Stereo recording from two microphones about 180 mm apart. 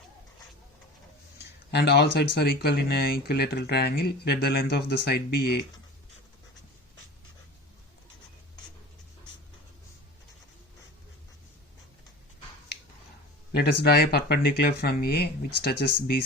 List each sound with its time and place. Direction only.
1.7 s speech: 65° left (ahead or behind)
13.5 s speech: 60° left (ahead or behind)